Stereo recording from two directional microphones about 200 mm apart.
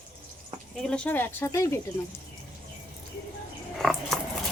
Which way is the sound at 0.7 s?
5° left (ahead or behind).